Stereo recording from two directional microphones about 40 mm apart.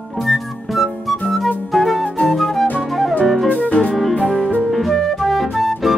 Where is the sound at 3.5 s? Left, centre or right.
Left.